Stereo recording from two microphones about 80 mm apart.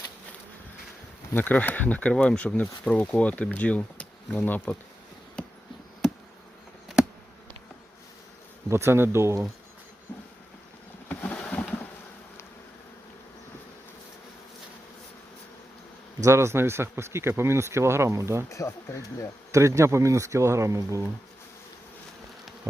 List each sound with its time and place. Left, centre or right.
1.3 s speech: left
8.7 s speech: right
10.1 s vehicle: left
11.1 s boat: left
16.2 s speech: right
18.4 s speech: left
19.5 s speech: right